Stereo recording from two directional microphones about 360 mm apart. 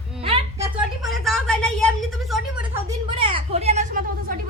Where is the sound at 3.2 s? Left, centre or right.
Centre.